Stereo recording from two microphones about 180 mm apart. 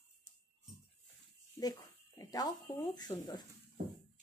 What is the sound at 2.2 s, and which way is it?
Speech, 20° left (ahead or behind).